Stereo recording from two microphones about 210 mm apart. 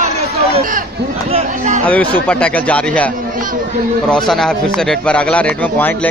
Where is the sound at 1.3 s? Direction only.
35° right (ahead or behind).